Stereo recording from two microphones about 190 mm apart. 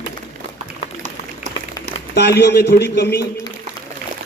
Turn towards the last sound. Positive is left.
turn(degrees=60)  # may be behind; listen again after turning